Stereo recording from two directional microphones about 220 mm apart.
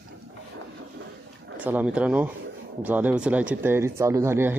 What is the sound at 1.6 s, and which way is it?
Speech, 5° right (ahead or behind).